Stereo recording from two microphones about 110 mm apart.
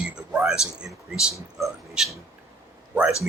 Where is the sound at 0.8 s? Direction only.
5° right (ahead or behind).